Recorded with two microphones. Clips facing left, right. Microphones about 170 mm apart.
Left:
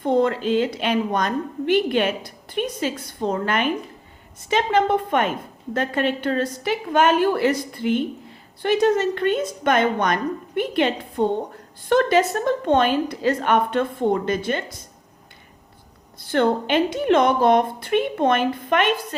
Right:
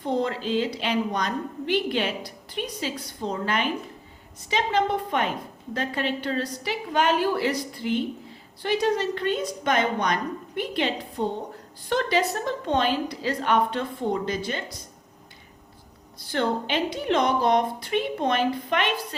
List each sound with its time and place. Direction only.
0.0 s a woman's voice: 55° left (ahead or behind)
16.2 s a woman's voice: 55° left (ahead or behind)